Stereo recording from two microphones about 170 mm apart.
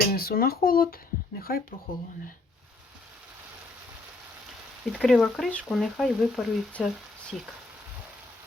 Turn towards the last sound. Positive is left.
turn(degrees=0)  # may be behind; listen again after turning